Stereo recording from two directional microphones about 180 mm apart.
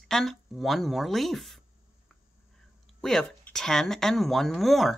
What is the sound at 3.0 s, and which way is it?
Speech, 5° left (ahead or behind).